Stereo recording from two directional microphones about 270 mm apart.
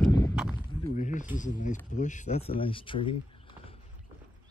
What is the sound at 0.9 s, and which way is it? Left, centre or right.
Speech, left.